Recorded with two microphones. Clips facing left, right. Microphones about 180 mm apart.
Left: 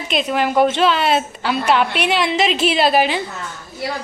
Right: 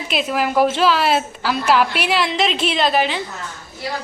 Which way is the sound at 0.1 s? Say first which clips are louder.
Left 2 dB; 5° right (ahead or behind).